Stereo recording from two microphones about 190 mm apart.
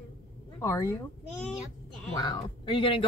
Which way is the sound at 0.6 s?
15° left (ahead or behind).